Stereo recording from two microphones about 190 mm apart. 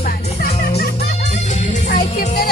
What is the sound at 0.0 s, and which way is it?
Music, 50° left (ahead or behind).